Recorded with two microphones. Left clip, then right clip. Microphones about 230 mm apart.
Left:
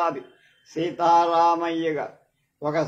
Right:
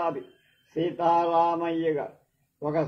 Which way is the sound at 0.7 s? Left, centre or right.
Left.